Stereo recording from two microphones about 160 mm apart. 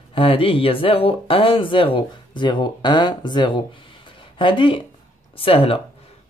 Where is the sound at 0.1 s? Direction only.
35° left (ahead or behind).